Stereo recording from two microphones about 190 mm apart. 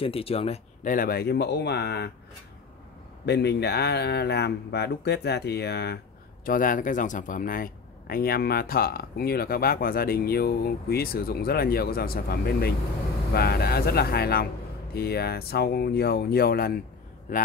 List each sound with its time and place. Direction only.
0.0 s speech: 30° left (ahead or behind)
0.9 s speech: 55° left (ahead or behind)
3.3 s speech: 60° left (ahead or behind)
6.4 s speech: 45° left (ahead or behind)